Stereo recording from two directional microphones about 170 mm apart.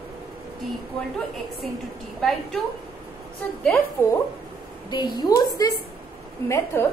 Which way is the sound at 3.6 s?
15° left (ahead or behind).